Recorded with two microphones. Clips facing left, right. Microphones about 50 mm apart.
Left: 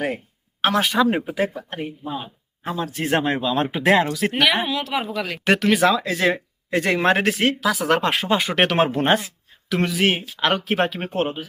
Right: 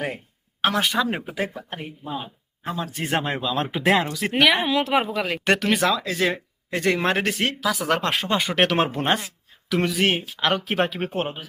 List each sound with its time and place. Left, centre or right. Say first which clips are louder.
0.6 s speech: left 3 dB; centre
4.7 s a woman's voice: right 4 dB; right
5.0 s speech: right 1 dB; centre
5.5 s speech: left 4 dB; centre